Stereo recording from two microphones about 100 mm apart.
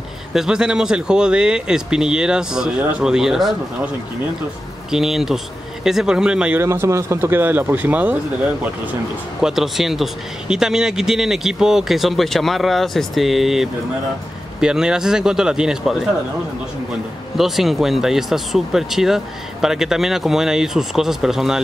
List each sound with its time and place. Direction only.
0.3 s speech: 5° right (ahead or behind)
4.9 s speech: 5° right (ahead or behind)
6.5 s speech: 25° right (ahead or behind)
9.4 s speech: 5° right (ahead or behind)
17.4 s speech: centre (ahead or behind)